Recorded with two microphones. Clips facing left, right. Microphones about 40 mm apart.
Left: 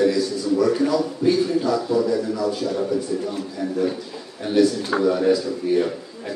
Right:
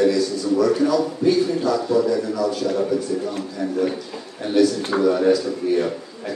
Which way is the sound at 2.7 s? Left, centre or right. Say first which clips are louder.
Right 2 dB; centre.